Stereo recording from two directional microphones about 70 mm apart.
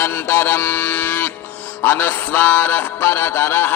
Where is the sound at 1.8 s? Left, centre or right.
Left.